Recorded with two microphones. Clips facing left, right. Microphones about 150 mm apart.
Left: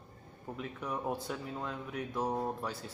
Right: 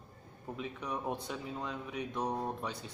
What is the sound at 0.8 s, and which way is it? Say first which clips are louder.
Speech: left 2 dB; 5° left (ahead or behind).